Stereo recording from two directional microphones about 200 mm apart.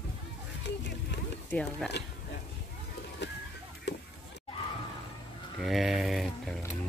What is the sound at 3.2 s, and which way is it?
Music, 60° left (ahead or behind).